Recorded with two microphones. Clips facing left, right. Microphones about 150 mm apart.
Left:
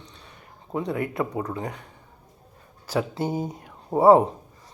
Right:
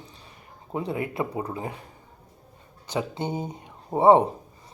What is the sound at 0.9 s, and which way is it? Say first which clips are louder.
Speech: left 2 dB; 25° right (ahead or behind).